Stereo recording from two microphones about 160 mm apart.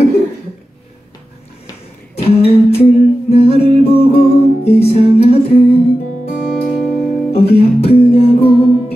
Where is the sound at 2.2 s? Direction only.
40° left (ahead or behind).